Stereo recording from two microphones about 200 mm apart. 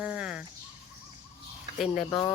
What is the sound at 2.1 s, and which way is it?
Speech, 20° left (ahead or behind).